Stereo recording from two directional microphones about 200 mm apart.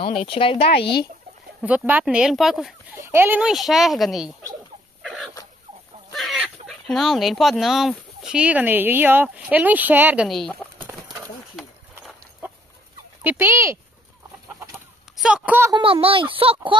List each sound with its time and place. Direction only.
0.0 s speech: 25° left (ahead or behind)
0.7 s speech: 55° left (ahead or behind)
1.6 s speech: 10° right (ahead or behind)
5.0 s a sound: centre (ahead or behind)
6.1 s speech: centre (ahead or behind)
11.0 s a sound: 20° right (ahead or behind)
11.5 s a sound: centre (ahead or behind)
13.2 s fowl: 10° right (ahead or behind)
15.1 s speech: 5° right (ahead or behind)
15.7 s speech: 25° right (ahead or behind)